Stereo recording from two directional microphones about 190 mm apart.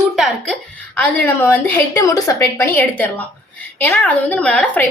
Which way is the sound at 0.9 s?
10° left (ahead or behind).